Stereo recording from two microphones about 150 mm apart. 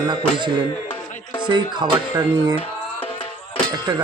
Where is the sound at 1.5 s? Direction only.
30° right (ahead or behind).